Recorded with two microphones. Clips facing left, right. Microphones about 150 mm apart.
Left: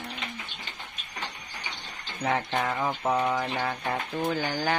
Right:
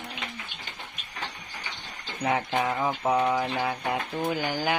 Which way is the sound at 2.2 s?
10° right (ahead or behind).